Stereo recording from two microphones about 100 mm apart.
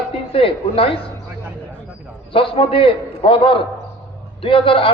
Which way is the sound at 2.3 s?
65° left (ahead or behind).